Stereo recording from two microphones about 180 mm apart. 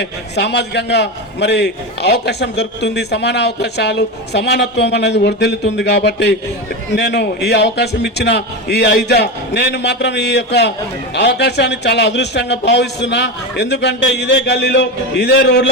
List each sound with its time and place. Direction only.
0.0 s a man's voice: 70° left (ahead or behind)